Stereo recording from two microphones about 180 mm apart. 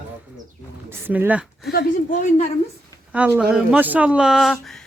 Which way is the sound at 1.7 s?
50° left (ahead or behind).